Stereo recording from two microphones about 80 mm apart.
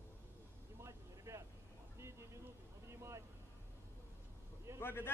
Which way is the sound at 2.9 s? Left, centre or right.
Right.